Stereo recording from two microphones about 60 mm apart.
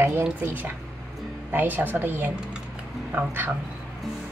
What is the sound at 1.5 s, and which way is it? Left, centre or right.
Speech, right.